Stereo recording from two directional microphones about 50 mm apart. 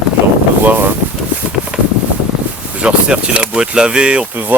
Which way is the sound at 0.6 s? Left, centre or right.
Right.